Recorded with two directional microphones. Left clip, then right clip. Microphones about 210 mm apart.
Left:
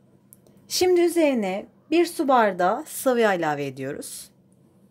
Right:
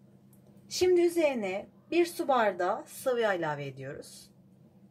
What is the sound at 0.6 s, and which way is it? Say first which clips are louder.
A woman's voice: left 5 dB; 50° left (ahead or behind).